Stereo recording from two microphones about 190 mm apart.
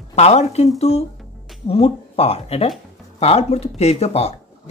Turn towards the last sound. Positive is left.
turn(degrees=35)  # may be behind; listen again after turning